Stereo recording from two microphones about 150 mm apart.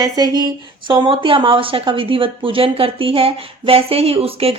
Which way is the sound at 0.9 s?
35° right (ahead or behind).